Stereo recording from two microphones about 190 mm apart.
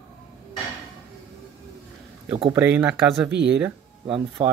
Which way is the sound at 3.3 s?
65° right (ahead or behind).